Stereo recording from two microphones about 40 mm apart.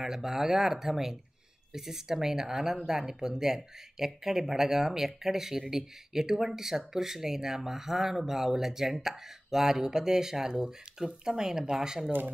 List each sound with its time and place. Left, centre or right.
0.0 s speech: centre